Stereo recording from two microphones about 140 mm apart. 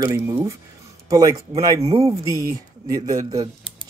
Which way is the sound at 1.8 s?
45° right (ahead or behind).